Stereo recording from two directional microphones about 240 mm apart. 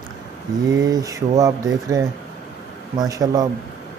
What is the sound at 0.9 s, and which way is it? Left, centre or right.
Speech, centre.